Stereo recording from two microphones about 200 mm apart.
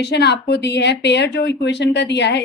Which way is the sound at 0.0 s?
55° left (ahead or behind).